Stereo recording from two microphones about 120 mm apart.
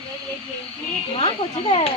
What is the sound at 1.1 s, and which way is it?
Speech, 50° left (ahead or behind).